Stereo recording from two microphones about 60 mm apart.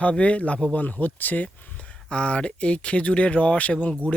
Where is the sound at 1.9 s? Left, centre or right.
Centre.